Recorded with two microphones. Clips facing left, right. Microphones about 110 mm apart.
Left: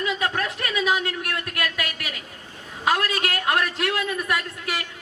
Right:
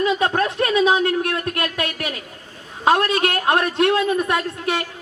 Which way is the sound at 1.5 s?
30° right (ahead or behind).